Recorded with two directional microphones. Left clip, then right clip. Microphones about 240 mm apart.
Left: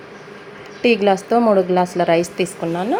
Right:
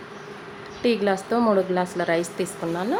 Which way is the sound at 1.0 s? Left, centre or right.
Centre.